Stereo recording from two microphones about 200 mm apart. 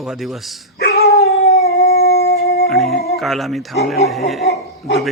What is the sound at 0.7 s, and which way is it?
Dog, 55° left (ahead or behind).